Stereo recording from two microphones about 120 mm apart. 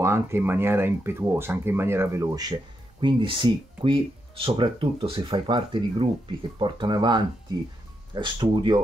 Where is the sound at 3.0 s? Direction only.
45° right (ahead or behind).